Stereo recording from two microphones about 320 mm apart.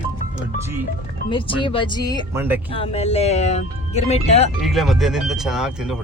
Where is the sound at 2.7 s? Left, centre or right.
Centre.